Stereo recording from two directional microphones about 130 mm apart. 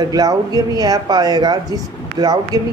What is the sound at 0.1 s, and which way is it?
Speech, 30° right (ahead or behind).